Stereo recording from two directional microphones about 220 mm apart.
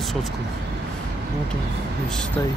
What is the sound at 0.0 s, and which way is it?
Vehicle, centre (ahead or behind).